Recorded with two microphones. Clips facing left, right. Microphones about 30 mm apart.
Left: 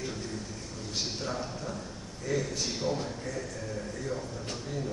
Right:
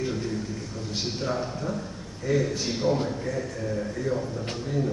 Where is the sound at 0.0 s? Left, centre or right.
Centre.